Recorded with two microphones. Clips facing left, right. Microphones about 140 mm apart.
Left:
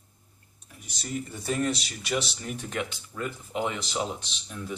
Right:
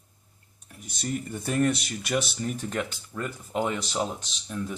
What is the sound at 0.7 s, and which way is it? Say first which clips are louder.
Speech: right 3 dB; 50° right (ahead or behind).